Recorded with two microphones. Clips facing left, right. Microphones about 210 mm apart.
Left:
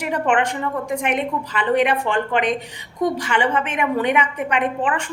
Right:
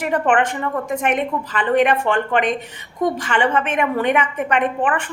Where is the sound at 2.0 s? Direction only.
60° right (ahead or behind).